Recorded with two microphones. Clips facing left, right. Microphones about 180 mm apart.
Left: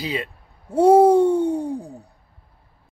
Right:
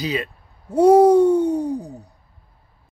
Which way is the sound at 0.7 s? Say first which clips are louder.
Right 1 dB; 25° left (ahead or behind).